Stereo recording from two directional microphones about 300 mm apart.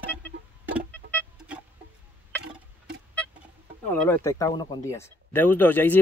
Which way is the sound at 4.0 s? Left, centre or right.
Centre.